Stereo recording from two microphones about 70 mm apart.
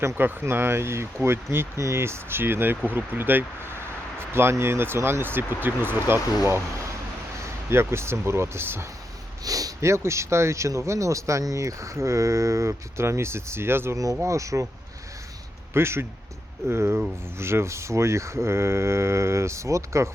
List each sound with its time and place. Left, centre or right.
0.2 s speech: right
7.7 s speech: right
9.4 s speech: right
13.9 s speech: right
15.7 s speech: right